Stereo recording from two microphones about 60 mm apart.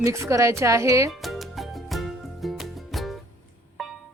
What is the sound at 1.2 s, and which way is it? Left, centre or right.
Music, centre.